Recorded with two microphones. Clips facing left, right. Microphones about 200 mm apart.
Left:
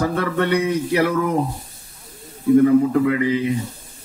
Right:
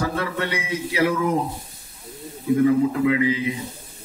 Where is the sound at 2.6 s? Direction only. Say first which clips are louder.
Left 3 dB; 45° left (ahead or behind).